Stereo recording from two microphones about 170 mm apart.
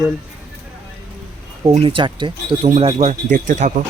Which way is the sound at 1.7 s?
30° right (ahead or behind).